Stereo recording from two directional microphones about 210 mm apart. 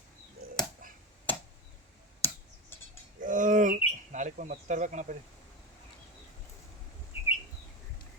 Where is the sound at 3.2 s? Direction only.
40° right (ahead or behind).